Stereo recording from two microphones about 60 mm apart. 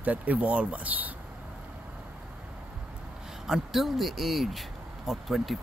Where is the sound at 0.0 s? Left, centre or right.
Right.